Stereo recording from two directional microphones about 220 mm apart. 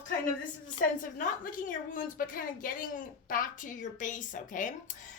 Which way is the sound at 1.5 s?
35° left (ahead or behind).